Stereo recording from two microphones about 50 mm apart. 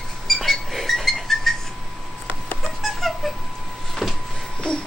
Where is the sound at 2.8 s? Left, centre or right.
Centre.